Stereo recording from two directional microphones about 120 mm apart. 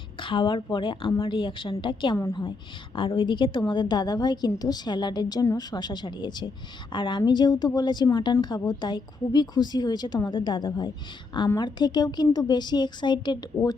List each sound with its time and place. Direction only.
0.2 s a woman's voice: 45° left (ahead or behind)